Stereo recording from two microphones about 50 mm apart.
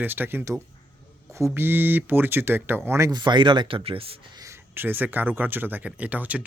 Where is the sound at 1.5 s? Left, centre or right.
Right.